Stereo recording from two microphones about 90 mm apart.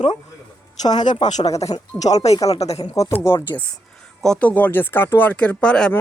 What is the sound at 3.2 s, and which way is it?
Speech, 25° left (ahead or behind).